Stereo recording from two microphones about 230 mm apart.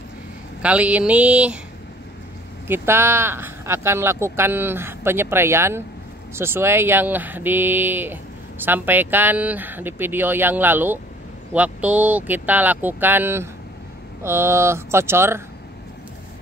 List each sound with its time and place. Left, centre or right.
0.6 s speech: centre
2.7 s speech: centre